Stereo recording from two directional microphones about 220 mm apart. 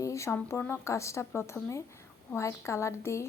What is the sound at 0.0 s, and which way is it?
A woman's voice, 15° left (ahead or behind).